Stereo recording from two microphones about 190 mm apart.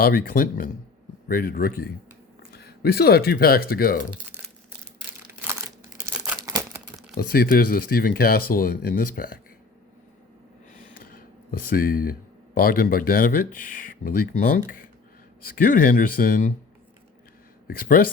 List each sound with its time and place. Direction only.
0.0 s speech: 50° left (ahead or behind)
6.0 s crumpling: 5° right (ahead or behind)
6.4 s crumpling: 20° right (ahead or behind)
7.2 s speech: 50° left (ahead or behind)
11.0 s a sound: 50° left (ahead or behind)
12.5 s speech: 50° left (ahead or behind)
17.7 s speech: 50° left (ahead or behind)